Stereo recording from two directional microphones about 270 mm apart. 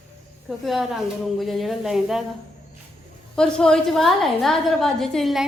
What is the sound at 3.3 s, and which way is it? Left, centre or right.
A woman's voice, centre.